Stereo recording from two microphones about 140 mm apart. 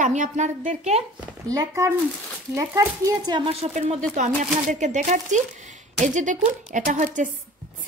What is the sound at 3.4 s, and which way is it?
Speech, 45° right (ahead or behind).